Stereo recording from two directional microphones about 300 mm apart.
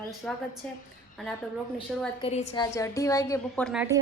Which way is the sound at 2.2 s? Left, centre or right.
Left.